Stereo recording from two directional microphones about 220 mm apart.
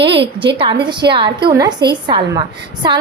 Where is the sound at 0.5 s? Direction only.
20° right (ahead or behind).